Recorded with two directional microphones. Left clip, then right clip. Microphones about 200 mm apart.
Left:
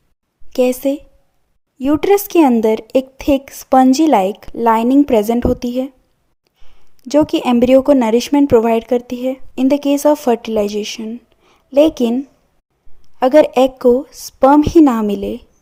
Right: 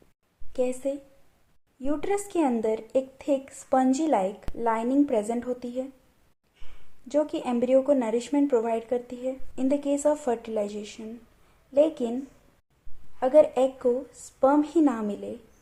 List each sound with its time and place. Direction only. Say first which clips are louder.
0.5 s speech: left 13 dB; 50° left (ahead or behind)
7.1 s speech: left 13 dB; 50° left (ahead or behind)